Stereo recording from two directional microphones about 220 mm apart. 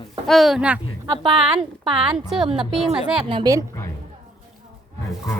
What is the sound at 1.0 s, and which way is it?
A woman's voice, 20° right (ahead or behind).